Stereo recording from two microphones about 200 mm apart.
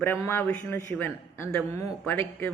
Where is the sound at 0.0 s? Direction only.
10° left (ahead or behind).